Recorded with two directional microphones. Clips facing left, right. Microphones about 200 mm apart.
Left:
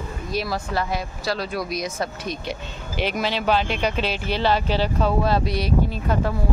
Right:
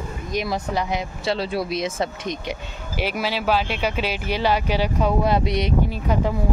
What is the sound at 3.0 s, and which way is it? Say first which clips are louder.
Speech: left 1 dB; 5° right (ahead or behind).